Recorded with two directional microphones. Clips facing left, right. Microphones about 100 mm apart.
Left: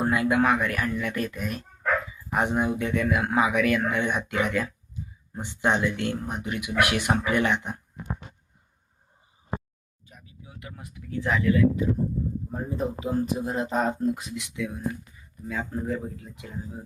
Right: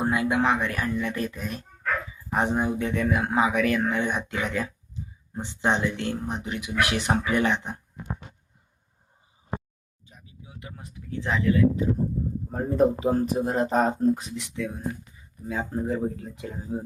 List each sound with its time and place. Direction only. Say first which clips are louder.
0.0 s speech: left 1 dB; 25° right (ahead or behind)
10.2 s speech: even; 25° right (ahead or behind)
12.5 s speech: right 12 dB; 50° right (ahead or behind)
14.7 s speech: left 1 dB; 25° right (ahead or behind)
16.0 s speech: right 7 dB; 40° right (ahead or behind)